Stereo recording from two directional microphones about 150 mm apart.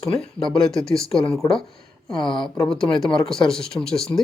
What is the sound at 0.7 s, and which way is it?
Speech, 5° left (ahead or behind).